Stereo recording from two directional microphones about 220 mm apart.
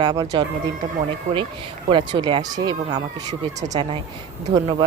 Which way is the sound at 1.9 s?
20° right (ahead or behind).